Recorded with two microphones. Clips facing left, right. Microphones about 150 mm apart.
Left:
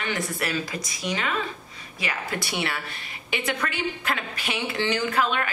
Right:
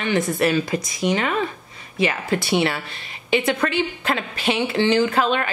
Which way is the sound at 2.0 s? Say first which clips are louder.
Right 9 dB; 25° right (ahead or behind).